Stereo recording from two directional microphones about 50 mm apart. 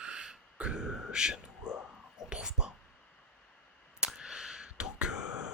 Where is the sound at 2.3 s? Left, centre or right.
Centre.